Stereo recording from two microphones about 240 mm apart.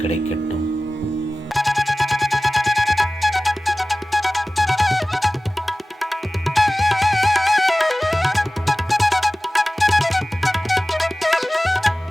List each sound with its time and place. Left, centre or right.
1.5 s music: centre